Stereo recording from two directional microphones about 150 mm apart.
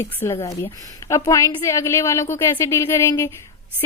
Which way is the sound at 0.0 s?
15° left (ahead or behind).